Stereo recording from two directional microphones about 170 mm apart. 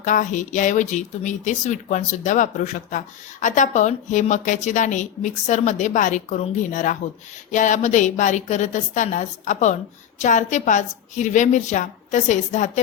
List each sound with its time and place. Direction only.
0.0 s speech: 50° left (ahead or behind)